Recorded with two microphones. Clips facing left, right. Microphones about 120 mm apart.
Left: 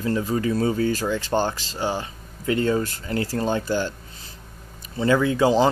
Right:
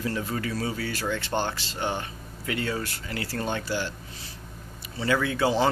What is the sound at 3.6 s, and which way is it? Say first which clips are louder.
Speech: left 6 dB; 45° left (ahead or behind).